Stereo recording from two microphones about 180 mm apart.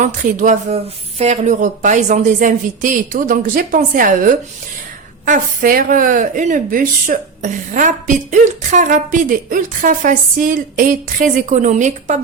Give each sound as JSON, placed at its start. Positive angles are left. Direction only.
{"t": 0.0, "sound": "a woman's voice", "side_deg": -45}